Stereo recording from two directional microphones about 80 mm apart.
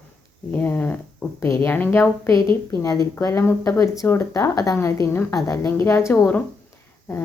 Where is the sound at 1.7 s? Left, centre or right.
Left.